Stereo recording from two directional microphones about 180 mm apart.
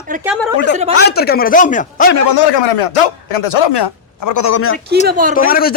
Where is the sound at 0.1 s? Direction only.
45° right (ahead or behind).